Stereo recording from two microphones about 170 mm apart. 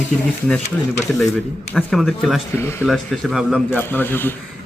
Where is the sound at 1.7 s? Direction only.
5° left (ahead or behind).